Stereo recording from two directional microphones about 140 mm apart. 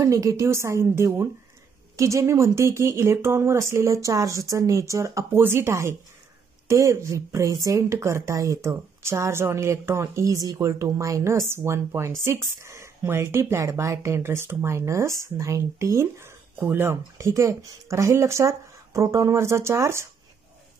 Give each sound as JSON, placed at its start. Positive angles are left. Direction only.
{"t": 0.0, "sound": "a woman's voice", "side_deg": -25}